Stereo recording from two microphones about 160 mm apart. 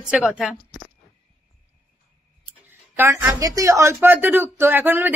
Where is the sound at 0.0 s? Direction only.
5° right (ahead or behind).